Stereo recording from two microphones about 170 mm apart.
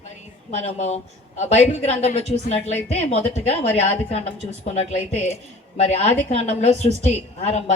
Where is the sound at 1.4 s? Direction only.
40° left (ahead or behind).